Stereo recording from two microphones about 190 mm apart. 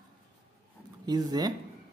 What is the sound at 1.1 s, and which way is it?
Speech, 20° right (ahead or behind).